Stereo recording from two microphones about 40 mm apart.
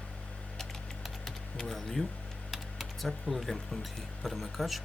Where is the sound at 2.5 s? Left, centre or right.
Centre.